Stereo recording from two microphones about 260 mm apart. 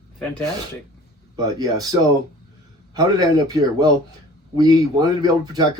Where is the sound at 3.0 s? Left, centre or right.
Centre.